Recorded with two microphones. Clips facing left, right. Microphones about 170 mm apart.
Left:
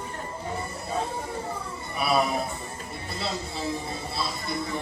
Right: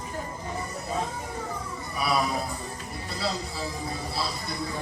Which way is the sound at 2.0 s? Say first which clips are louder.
Left 2 dB; 25° left (ahead or behind).